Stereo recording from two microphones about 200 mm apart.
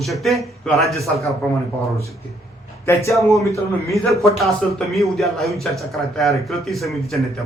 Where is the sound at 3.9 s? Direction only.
Centre (ahead or behind).